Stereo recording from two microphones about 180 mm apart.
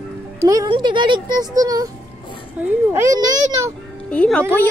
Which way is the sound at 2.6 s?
10° right (ahead or behind).